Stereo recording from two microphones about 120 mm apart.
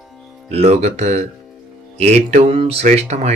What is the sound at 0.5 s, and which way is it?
A man's voice, 65° right (ahead or behind).